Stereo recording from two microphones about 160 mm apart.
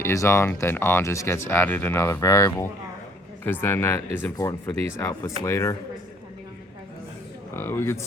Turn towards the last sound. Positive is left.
turn(degrees=15)  # may be behind; listen again after turning